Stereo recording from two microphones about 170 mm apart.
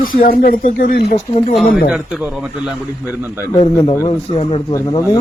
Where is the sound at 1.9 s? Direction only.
5° right (ahead or behind).